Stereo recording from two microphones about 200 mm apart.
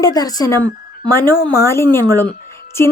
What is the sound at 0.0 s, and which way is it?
Speech, 20° left (ahead or behind).